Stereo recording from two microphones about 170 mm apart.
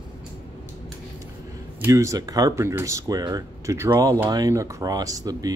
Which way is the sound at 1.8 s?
20° right (ahead or behind).